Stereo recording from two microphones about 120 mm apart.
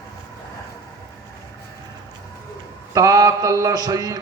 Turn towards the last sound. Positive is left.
turn(degrees=-30)  # may be behind; listen again after turning